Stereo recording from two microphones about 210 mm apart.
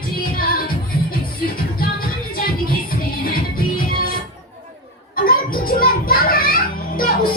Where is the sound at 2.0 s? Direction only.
45° left (ahead or behind).